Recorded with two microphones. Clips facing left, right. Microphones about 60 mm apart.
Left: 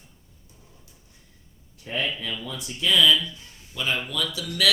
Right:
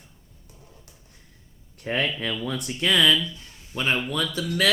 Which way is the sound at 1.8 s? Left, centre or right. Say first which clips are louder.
Right 3 dB; right.